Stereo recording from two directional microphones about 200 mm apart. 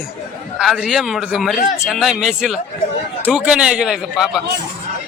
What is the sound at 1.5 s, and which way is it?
Speech, 40° left (ahead or behind).